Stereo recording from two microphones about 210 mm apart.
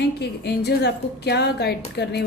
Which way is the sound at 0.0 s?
55° left (ahead or behind).